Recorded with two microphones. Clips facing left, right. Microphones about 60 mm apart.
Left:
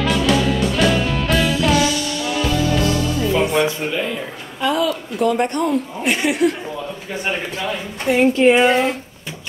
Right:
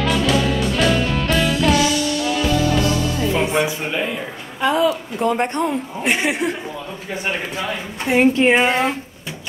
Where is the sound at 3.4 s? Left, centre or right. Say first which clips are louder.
Left 2 dB; centre.